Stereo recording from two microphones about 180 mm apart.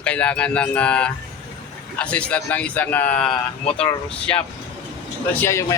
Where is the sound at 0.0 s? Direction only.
5° left (ahead or behind).